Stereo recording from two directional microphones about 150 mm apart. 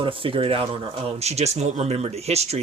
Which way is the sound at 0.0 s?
35° right (ahead or behind).